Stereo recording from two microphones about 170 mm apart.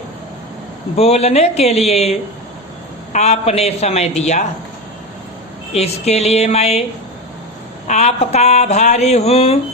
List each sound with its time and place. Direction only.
0.9 s speech: 40° left (ahead or behind)
5.7 s speech: 40° left (ahead or behind)
7.9 s speech: 40° left (ahead or behind)